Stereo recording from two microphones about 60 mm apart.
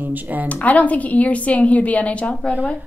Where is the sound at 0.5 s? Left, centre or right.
Left.